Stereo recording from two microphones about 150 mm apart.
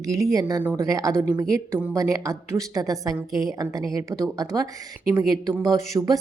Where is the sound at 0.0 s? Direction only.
20° right (ahead or behind).